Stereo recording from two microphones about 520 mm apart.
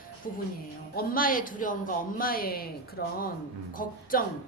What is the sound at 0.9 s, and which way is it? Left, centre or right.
A woman's voice, centre.